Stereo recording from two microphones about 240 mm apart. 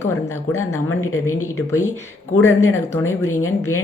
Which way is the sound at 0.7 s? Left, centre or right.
Left.